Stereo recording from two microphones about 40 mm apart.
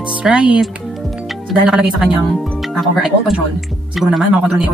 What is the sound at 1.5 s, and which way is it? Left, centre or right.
Speech, centre.